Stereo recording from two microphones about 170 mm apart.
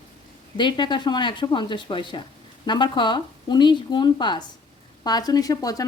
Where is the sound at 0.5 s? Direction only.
25° left (ahead or behind).